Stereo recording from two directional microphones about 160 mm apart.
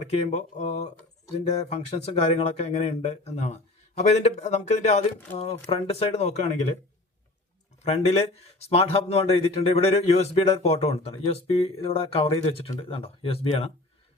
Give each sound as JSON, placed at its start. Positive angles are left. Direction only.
{"t": 0.0, "sound": "speech", "side_deg": 40}
{"t": 7.8, "sound": "speech", "side_deg": 45}